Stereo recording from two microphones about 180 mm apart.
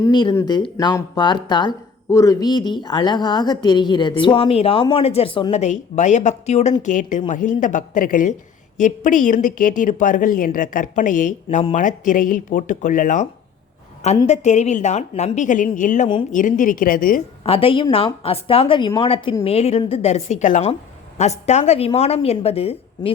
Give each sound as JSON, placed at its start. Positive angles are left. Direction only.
{"t": 0.0, "sound": "a woman's voice", "side_deg": 25}
{"t": 11.4, "sound": "a woman's voice", "side_deg": 35}
{"t": 14.3, "sound": "a woman's voice", "side_deg": 40}
{"t": 17.4, "sound": "a woman's voice", "side_deg": 30}